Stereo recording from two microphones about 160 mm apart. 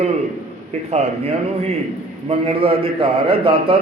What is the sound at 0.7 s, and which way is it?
A man's voice, 45° right (ahead or behind).